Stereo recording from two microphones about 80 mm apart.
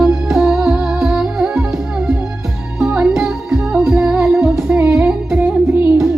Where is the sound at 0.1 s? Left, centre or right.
Centre.